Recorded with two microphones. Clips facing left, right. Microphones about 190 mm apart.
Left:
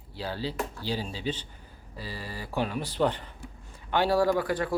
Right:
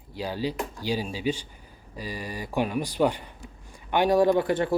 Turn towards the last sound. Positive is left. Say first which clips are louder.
# right 4 dB
turn(degrees=-25)  # may be behind; listen again after turning